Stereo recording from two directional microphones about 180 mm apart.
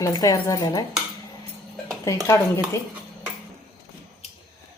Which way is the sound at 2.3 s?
15° left (ahead or behind).